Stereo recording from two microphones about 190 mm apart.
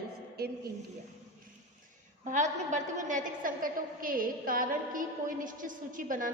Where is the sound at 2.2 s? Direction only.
40° right (ahead or behind).